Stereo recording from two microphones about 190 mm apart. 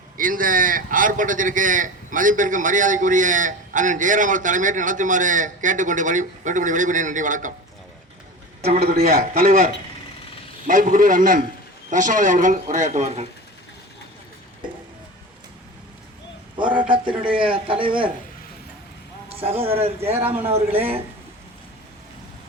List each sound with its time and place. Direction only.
0.2 s a man's voice: 45° right (ahead or behind)
8.8 s a man's voice: 50° right (ahead or behind)
10.7 s a man's voice: 45° right (ahead or behind)
16.6 s a man's voice: 25° right (ahead or behind)
17.2 s speech: 5° right (ahead or behind)
17.5 s speech: 25° right (ahead or behind)
19.5 s a man's voice: 10° right (ahead or behind)